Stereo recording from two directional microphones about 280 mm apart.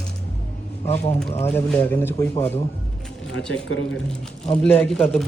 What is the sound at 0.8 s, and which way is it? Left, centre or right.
Speech, left.